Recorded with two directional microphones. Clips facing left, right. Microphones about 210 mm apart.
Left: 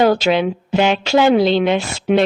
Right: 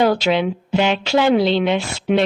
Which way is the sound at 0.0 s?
45° left (ahead or behind).